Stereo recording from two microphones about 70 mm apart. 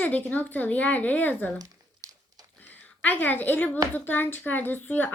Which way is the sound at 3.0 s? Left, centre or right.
Left.